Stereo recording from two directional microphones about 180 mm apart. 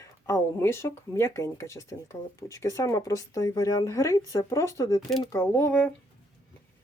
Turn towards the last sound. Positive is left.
turn(degrees=10)  # may be behind; listen again after turning